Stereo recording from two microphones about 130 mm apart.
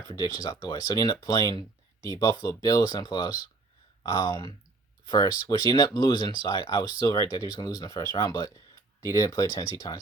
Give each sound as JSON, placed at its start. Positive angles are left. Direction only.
{"t": 0.1, "sound": "speech", "side_deg": 30}
{"t": 5.0, "sound": "speech", "side_deg": 25}